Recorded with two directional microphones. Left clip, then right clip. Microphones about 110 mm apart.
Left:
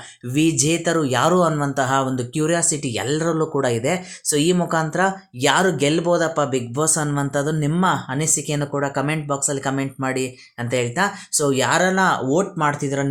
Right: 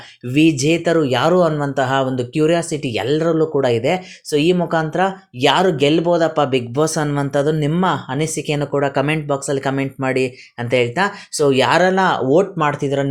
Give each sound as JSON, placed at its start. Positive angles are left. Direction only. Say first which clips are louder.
{"t": 0.3, "sound": "speech", "louder": "right 4 dB", "side_deg": -20}
{"t": 4.3, "sound": "speech", "louder": "right 3 dB", "side_deg": -5}